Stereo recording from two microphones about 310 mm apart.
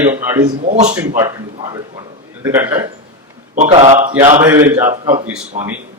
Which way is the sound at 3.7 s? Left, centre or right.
Right.